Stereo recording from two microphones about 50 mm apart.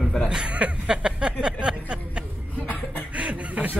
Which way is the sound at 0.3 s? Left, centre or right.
Centre.